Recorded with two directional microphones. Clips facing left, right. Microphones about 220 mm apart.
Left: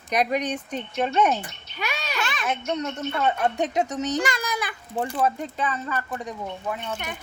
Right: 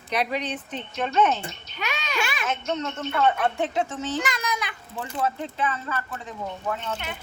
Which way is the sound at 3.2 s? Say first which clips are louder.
Left 1 dB; 20° left (ahead or behind).